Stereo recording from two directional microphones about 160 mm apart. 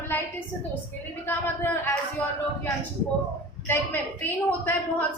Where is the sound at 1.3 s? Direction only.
15° left (ahead or behind).